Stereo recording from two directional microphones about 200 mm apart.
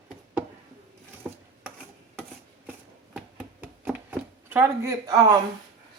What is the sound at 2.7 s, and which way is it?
Chopping, 5° right (ahead or behind).